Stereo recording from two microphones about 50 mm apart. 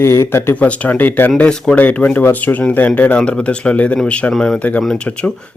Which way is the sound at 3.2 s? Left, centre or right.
Left.